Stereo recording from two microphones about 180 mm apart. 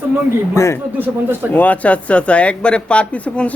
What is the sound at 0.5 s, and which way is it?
Speech, 15° left (ahead or behind).